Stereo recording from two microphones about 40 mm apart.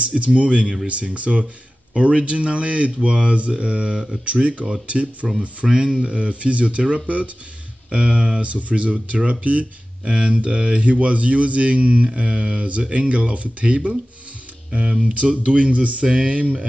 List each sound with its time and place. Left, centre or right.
0.1 s speech: right
5.7 s speech: centre; by 9.7 s right
10.0 s speech: right
14.7 s speech: right